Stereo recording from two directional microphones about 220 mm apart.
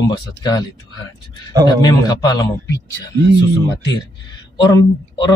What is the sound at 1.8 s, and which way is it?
Speech, 20° left (ahead or behind).